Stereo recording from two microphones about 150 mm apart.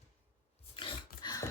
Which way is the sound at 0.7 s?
30° left (ahead or behind).